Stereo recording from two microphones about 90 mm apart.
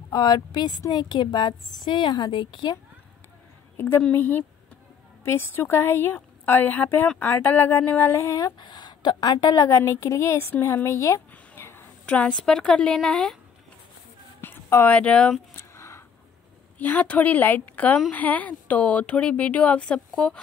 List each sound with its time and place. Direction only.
0.1 s a woman's voice: 50° left (ahead or behind)
3.7 s a woman's voice: 20° left (ahead or behind)
8.4 s a woman's voice: 50° left (ahead or behind); by 11.8 s 25° left (ahead or behind)
12.1 s speech: 15° left (ahead or behind)
14.4 s speech: 25° left (ahead or behind)
15.5 s a sound: 30° left (ahead or behind)
16.7 s speech: 20° left (ahead or behind)